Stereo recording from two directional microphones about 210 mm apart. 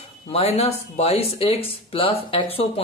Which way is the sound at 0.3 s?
30° left (ahead or behind).